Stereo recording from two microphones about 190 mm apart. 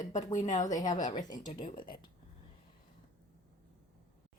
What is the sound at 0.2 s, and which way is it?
A woman's voice, 20° left (ahead or behind).